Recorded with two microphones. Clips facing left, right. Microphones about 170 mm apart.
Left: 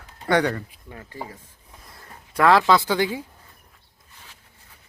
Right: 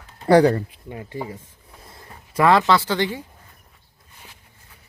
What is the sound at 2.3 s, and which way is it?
Speech, centre (ahead or behind).